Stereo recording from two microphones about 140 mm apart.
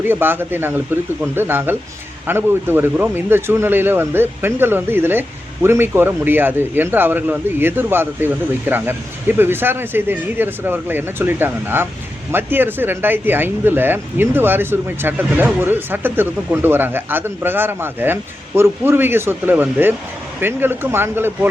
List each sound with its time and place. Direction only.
0.0 s speech: 15° right (ahead or behind)